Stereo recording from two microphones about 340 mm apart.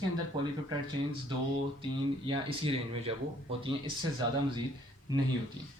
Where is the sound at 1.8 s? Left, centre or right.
Centre.